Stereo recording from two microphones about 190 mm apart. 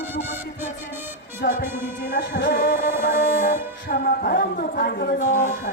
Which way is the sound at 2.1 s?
65° left (ahead or behind).